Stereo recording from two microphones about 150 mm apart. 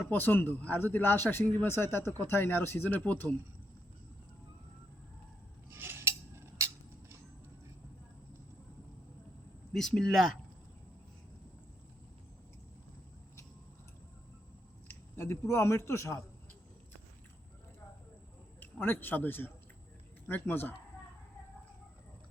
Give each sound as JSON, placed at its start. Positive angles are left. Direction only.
{"t": 0.0, "sound": "a man's voice", "side_deg": 15}
{"t": 5.7, "sound": "cutlery", "side_deg": -15}
{"t": 9.7, "sound": "speech", "side_deg": 5}
{"t": 14.8, "sound": "a man's voice", "side_deg": 15}
{"t": 18.6, "sound": "a man's voice", "side_deg": 15}